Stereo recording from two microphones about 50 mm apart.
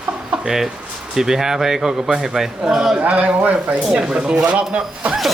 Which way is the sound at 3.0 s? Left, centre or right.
Right.